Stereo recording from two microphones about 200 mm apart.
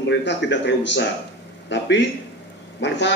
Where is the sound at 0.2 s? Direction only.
60° left (ahead or behind).